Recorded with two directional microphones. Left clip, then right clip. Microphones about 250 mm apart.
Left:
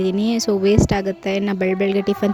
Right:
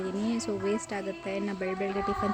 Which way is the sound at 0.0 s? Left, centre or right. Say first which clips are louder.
Left 12 dB; left.